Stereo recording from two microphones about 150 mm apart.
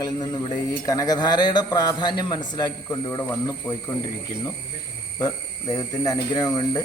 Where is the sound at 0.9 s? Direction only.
25° left (ahead or behind).